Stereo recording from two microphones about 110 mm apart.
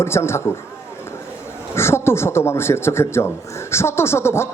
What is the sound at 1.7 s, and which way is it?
A man's voice, 25° left (ahead or behind).